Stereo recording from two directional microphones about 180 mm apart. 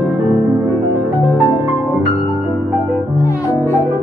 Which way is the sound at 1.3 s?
15° right (ahead or behind).